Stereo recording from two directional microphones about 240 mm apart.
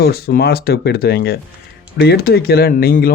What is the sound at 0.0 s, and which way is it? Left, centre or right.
Speech, left.